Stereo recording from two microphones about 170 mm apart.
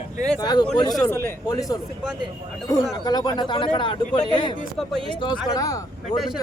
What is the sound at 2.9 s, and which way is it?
Speech, 25° left (ahead or behind).